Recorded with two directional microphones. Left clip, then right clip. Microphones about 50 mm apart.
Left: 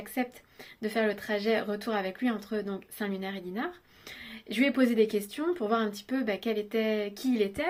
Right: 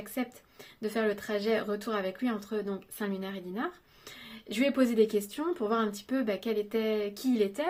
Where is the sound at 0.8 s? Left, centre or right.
Right.